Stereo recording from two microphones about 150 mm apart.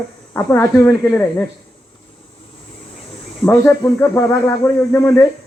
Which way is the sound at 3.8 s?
15° left (ahead or behind).